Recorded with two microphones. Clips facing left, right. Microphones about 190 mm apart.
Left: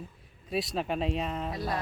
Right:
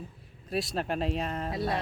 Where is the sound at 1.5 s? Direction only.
25° right (ahead or behind).